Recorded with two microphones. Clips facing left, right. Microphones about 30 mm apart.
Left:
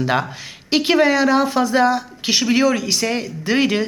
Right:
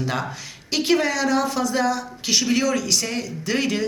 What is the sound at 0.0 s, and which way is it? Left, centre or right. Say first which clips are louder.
A woman's voice: left 6 dB; left.